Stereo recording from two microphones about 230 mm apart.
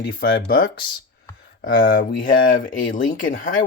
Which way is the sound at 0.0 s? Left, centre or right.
Left.